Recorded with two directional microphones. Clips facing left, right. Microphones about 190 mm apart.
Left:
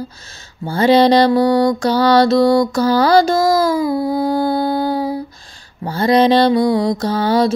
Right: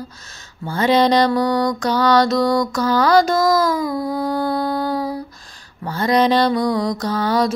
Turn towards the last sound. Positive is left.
turn(degrees=30)  # may be behind; listen again after turning